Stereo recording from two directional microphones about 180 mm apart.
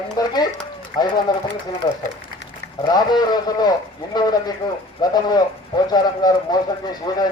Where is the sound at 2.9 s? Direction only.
20° left (ahead or behind).